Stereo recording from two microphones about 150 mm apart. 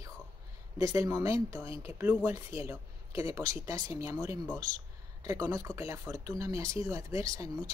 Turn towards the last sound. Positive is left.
turn(degrees=-20)  # may be behind; listen again after turning